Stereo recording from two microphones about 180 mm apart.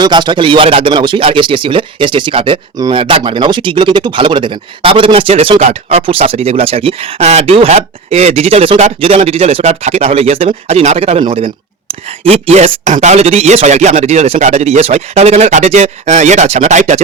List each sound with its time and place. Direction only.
0.0 s speech: 25° right (ahead or behind); by 17.0 s 40° right (ahead or behind)